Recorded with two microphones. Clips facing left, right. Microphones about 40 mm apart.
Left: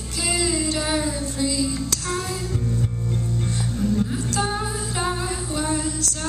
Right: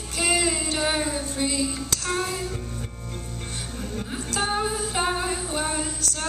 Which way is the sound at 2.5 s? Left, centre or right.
Centre.